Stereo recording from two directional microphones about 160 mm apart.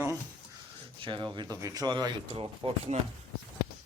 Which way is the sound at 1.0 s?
30° right (ahead or behind).